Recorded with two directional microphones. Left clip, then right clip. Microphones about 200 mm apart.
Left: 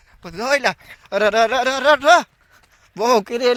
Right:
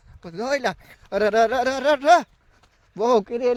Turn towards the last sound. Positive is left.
turn(degrees=10)  # may be behind; listen again after turning